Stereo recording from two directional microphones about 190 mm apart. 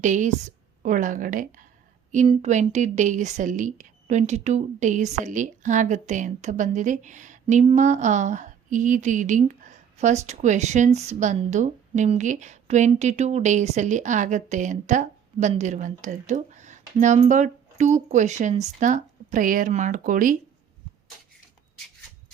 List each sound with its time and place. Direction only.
0.0 s speech: 40° right (ahead or behind)